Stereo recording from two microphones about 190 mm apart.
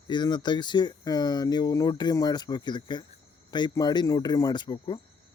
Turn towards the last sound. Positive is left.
turn(degrees=25)  # may be behind; listen again after turning